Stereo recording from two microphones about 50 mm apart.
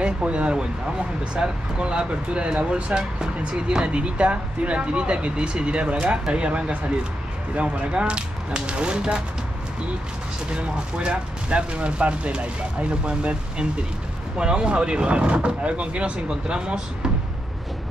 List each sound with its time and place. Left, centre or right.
0.0 s speech: right
10.5 s speech: right